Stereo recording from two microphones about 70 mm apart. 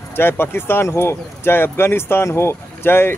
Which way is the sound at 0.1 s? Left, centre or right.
Left.